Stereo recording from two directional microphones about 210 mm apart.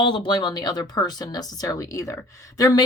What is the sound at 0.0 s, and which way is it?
Speech, 25° left (ahead or behind).